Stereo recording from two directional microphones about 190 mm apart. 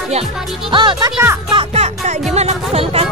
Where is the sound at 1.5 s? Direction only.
35° right (ahead or behind).